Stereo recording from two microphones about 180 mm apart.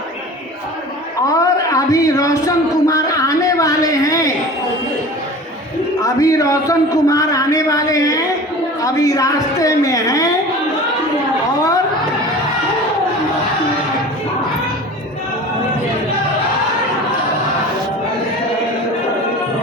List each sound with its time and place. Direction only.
1.3 s speech: 20° left (ahead or behind)
6.0 s a man's voice: 20° left (ahead or behind)